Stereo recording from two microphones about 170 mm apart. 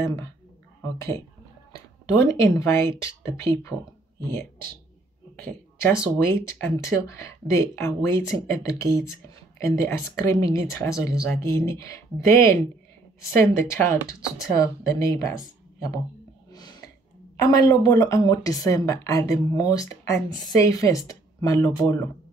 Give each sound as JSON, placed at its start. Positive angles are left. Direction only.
{"t": 0.0, "sound": "speech", "side_deg": 15}
{"t": 5.3, "sound": "speech", "side_deg": 10}
{"t": 13.6, "sound": "speech", "side_deg": 15}
{"t": 16.4, "sound": "a sound", "side_deg": 25}
{"t": 17.5, "sound": "speech", "side_deg": 20}